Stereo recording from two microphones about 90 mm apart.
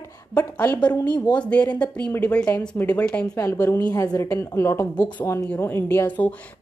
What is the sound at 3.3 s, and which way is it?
Speech, 30° left (ahead or behind).